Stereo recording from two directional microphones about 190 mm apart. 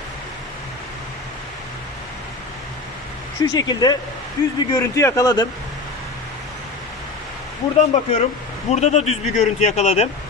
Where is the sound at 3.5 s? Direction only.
20° left (ahead or behind).